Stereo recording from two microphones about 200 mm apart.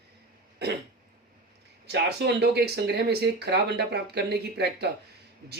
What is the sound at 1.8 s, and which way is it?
Speech, 55° right (ahead or behind).